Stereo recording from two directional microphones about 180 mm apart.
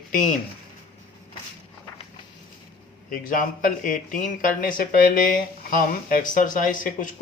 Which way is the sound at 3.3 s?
50° left (ahead or behind).